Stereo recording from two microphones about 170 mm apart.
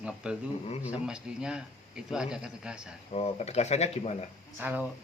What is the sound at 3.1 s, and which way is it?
Speech, 35° left (ahead or behind).